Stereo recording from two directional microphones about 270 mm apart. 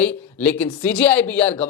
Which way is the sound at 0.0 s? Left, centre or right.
Centre.